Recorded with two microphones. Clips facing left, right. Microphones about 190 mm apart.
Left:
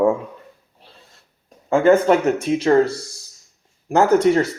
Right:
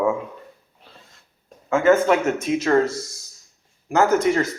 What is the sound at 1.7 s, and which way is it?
Speech, 35° left (ahead or behind).